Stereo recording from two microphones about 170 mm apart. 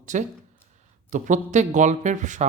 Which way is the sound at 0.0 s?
45° right (ahead or behind).